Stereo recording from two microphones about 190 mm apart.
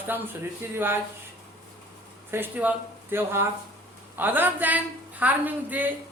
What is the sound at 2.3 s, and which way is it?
Speech, 10° right (ahead or behind).